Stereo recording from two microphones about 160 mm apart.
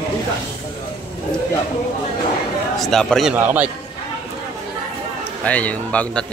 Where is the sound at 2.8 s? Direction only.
5° left (ahead or behind).